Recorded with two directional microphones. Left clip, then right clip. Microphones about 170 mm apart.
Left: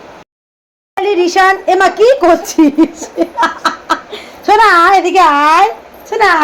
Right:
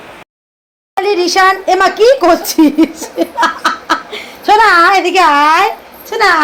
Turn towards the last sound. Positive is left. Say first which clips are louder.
# even
turn(degrees=10)  # may be behind; listen again after turning